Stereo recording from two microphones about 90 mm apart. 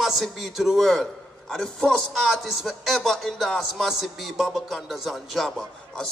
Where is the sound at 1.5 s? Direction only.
5° left (ahead or behind).